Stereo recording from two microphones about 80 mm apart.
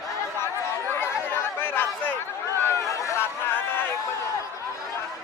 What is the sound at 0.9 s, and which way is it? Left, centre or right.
Chatter, left.